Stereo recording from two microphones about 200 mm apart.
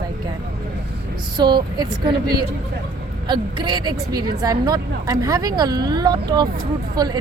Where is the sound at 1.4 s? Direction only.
20° right (ahead or behind).